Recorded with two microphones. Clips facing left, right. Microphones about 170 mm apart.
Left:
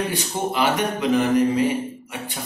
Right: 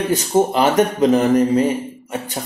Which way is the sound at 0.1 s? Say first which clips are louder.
Right 9 dB; 40° right (ahead or behind).